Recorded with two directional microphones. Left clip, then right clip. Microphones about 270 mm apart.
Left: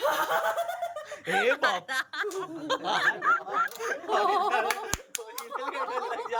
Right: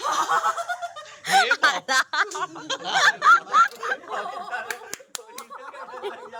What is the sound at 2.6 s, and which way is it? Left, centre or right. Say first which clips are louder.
Snicker: right 2 dB; centre.